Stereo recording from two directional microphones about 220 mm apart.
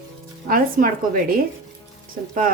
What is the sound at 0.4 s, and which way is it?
Speech, 40° right (ahead or behind).